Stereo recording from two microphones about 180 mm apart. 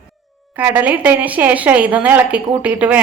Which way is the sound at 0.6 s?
10° right (ahead or behind).